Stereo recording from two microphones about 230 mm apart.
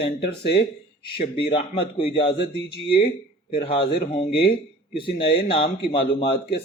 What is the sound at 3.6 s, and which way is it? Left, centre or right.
A man's voice, left.